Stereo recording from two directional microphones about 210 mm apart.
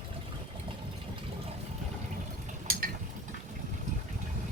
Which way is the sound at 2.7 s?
45° right (ahead or behind).